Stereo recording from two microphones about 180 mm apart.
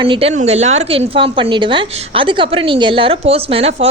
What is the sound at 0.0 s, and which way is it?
A woman's voice, 30° right (ahead or behind).